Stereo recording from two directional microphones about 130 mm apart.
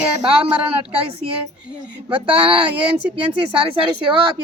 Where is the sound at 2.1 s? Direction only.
40° right (ahead or behind).